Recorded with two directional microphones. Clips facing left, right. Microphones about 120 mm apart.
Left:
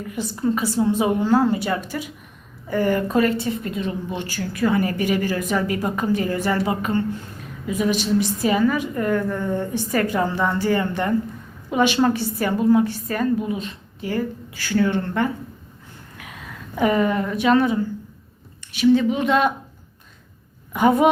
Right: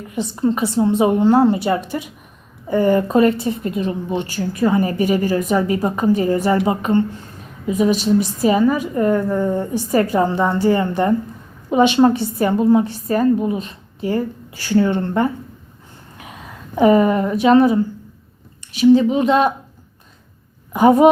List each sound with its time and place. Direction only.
0.2 s a woman's voice: 25° right (ahead or behind)
16.7 s a woman's voice: 30° right (ahead or behind)
18.8 s a woman's voice: 35° right (ahead or behind)
20.7 s a woman's voice: 30° right (ahead or behind)